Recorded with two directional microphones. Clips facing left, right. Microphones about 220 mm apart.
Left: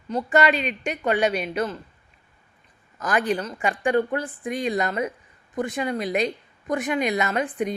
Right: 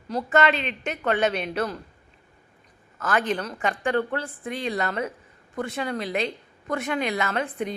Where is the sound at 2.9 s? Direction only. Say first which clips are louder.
Left 2 dB; 15° left (ahead or behind).